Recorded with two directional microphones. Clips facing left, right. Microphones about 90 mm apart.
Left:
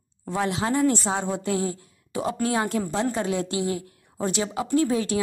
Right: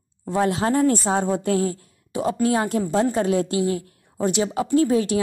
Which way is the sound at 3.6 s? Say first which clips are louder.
Right 4 dB; 20° left (ahead or behind).